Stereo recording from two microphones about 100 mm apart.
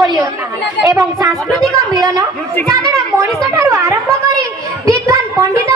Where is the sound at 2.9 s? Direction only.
30° right (ahead or behind).